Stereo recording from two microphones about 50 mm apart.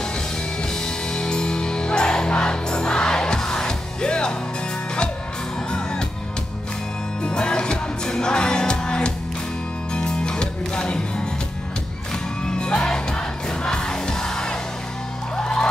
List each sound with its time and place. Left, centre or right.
0.6 s music: centre
5.7 s music: centre
7.2 s music: centre
12.4 s music: centre